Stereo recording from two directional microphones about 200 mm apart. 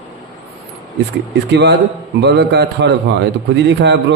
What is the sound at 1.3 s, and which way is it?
A man's voice, 60° right (ahead or behind).